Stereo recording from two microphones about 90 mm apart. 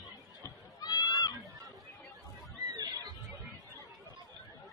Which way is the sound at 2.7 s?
50° right (ahead or behind).